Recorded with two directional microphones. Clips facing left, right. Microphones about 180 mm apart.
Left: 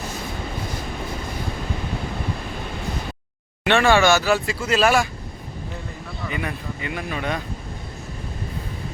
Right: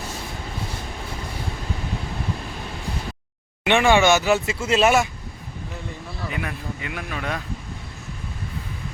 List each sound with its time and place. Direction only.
3.6 s speech: 15° right (ahead or behind)
6.3 s a man's voice: centre (ahead or behind)